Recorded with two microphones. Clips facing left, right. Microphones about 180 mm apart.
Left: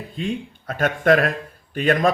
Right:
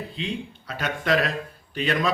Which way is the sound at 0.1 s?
50° left (ahead or behind).